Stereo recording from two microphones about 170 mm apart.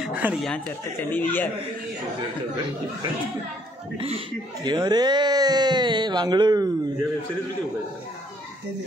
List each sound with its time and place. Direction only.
0.0 s a sound: 5° right (ahead or behind)
1.1 s a man's voice: 10° left (ahead or behind)
4.6 s speech: 25° right (ahead or behind)